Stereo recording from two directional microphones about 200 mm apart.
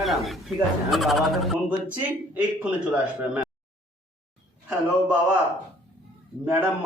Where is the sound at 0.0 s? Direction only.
Centre (ahead or behind).